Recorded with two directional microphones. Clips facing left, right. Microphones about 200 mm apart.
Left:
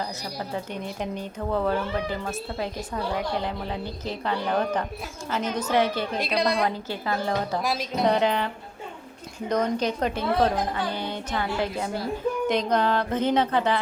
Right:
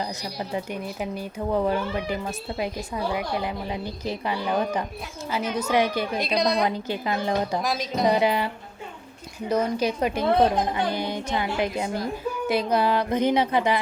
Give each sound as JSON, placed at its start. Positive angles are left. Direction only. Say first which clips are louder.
{"t": 0.0, "sound": "speech", "louder": "right 1 dB", "side_deg": -15}
{"t": 6.1, "sound": "a woman's voice", "louder": "right 1 dB", "side_deg": 5}
{"t": 6.7, "sound": "speech", "louder": "right 2 dB", "side_deg": -15}
{"t": 7.6, "sound": "a woman's voice", "louder": "right 1 dB", "side_deg": 5}
{"t": 8.0, "sound": "speech", "louder": "right 1 dB", "side_deg": -10}
{"t": 9.5, "sound": "speech", "louder": "right 1 dB", "side_deg": -10}